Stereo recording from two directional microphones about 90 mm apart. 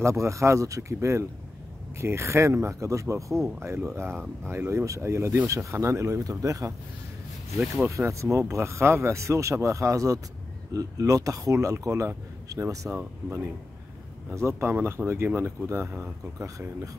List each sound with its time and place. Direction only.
0.0 s speech: 35° right (ahead or behind)